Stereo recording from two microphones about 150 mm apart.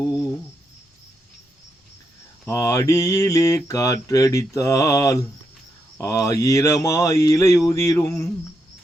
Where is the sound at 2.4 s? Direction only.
20° left (ahead or behind).